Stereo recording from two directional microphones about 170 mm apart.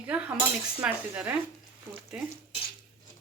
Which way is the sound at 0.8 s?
5° right (ahead or behind).